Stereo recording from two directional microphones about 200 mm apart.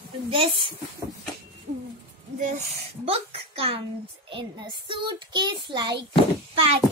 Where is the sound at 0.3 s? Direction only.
25° right (ahead or behind).